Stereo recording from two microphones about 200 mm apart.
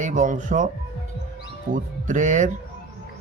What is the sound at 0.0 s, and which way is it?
Speech, 40° right (ahead or behind).